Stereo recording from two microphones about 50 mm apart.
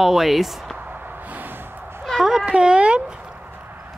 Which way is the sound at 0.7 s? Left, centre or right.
Right.